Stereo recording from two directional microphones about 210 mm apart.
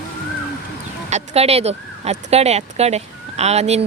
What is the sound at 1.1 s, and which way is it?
Speech, 30° right (ahead or behind).